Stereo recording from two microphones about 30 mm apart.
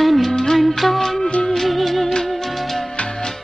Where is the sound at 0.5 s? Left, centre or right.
Centre.